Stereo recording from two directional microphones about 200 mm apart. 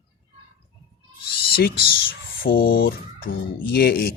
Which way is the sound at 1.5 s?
50° left (ahead or behind).